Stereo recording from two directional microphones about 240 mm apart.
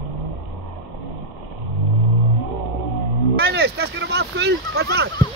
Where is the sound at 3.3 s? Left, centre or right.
Right.